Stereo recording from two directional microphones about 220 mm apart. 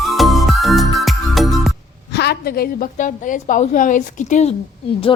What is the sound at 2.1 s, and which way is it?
A woman's voice, 50° left (ahead or behind).